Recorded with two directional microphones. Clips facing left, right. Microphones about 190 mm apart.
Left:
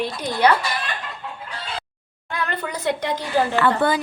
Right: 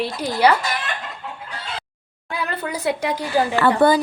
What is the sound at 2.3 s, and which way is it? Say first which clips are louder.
A woman's voice: right 1 dB; 5° right (ahead or behind).